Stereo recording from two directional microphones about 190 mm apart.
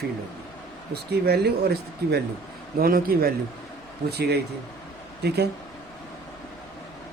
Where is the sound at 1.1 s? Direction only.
60° right (ahead or behind).